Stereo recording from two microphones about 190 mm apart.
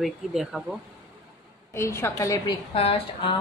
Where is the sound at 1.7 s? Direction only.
15° left (ahead or behind).